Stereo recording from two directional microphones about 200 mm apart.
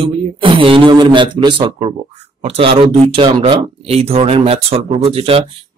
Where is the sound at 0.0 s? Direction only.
25° right (ahead or behind).